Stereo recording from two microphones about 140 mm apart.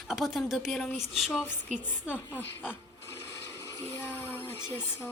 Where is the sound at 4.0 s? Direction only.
15° left (ahead or behind).